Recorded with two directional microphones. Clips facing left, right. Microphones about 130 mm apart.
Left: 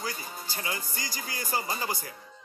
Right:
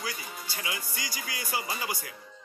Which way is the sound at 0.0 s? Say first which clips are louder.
Left 1 dB; 40° left (ahead or behind).